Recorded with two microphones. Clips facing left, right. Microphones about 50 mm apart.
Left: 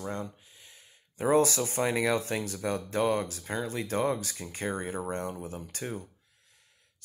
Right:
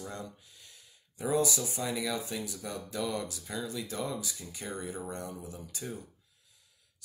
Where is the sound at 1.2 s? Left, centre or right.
Left.